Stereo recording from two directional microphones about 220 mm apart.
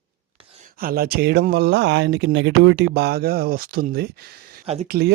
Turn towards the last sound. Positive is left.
turn(degrees=-45)  # may be behind; listen again after turning